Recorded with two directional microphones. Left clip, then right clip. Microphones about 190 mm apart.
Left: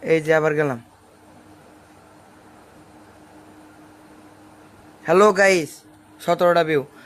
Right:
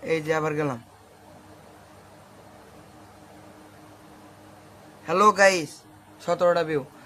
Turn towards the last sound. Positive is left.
turn(degrees=25)  # may be behind; listen again after turning